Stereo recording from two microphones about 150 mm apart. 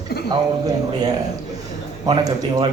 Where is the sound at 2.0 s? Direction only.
25° right (ahead or behind).